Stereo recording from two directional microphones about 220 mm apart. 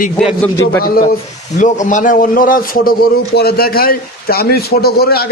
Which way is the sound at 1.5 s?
35° left (ahead or behind).